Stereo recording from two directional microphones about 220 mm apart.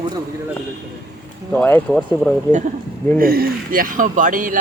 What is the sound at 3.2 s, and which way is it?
Speech, 45° right (ahead or behind).